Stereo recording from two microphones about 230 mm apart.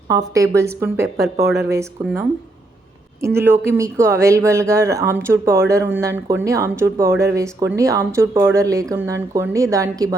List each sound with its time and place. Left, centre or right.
0.1 s speech: centre
1.4 s speech: right
1.6 s speech: centre